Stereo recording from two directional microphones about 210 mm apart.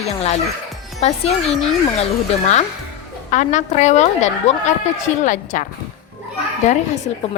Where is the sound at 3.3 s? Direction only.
35° left (ahead or behind).